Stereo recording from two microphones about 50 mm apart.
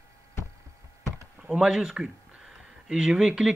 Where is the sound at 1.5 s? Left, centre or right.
Centre.